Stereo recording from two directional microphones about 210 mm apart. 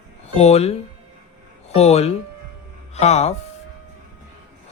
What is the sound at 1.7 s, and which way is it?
A man's voice, 30° left (ahead or behind).